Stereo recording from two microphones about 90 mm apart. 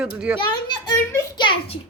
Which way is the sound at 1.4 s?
65° left (ahead or behind).